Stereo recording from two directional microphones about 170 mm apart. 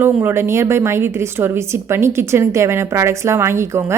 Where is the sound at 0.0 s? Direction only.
15° right (ahead or behind).